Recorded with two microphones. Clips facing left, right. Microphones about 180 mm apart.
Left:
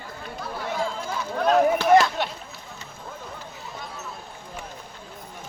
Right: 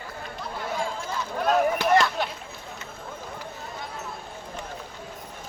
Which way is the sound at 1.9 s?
15° left (ahead or behind).